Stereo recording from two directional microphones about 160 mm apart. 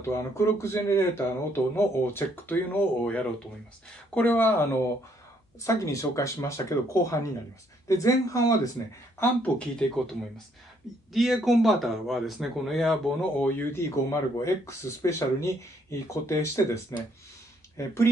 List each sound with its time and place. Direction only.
0.1 s speech: 15° left (ahead or behind)
11.1 s speech: centre (ahead or behind)
13.5 s speech: 15° left (ahead or behind)